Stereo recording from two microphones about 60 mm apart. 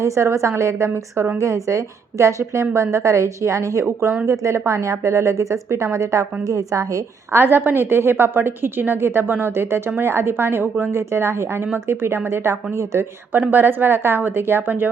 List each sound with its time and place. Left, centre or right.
0.0 s a woman's voice: right
7.3 s a woman's voice: right
13.5 s a woman's voice: right